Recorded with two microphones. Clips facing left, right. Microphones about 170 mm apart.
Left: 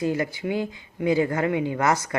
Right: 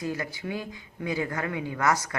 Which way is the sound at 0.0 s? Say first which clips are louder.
Left 7 dB; 25° left (ahead or behind).